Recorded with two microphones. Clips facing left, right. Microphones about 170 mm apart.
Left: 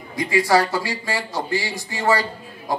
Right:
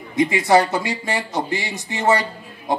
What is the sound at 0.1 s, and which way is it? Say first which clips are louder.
A man's voice: right 3 dB; 20° right (ahead or behind).